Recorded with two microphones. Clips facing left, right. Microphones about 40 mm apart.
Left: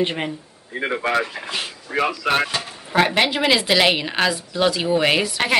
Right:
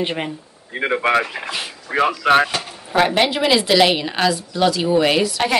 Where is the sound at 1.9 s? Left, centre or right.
Right.